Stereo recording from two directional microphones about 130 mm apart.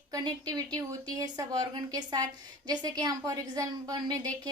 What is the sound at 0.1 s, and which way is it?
A woman's voice, 30° right (ahead or behind).